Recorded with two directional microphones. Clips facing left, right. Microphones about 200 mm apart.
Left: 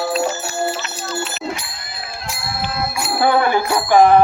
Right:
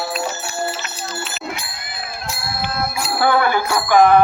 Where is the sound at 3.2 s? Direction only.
25° left (ahead or behind).